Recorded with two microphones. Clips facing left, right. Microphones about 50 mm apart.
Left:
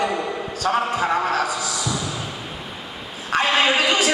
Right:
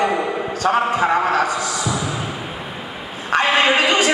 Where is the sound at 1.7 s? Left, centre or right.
Centre.